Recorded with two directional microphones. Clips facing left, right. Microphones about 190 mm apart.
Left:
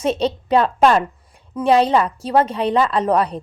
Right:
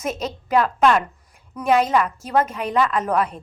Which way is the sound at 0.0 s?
30° left (ahead or behind).